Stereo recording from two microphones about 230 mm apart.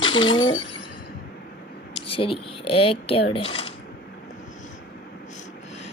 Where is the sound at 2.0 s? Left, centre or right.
Left.